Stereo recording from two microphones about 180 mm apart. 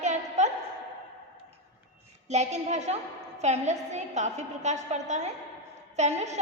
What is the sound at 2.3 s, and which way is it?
A woman's voice, 40° right (ahead or behind).